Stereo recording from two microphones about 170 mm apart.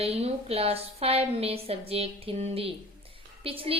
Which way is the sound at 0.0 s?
35° right (ahead or behind).